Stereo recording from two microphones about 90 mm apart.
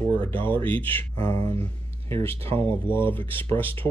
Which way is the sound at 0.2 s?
20° left (ahead or behind).